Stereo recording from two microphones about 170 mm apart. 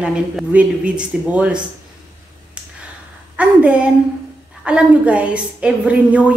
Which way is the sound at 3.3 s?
5° right (ahead or behind).